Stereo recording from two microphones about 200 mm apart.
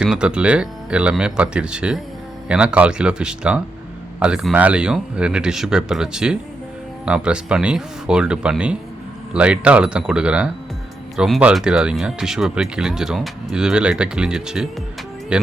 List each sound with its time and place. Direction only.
0.0 s speech: 5° right (ahead or behind)